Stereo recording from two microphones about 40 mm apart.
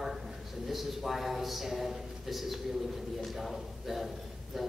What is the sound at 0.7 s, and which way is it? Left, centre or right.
Speech, centre.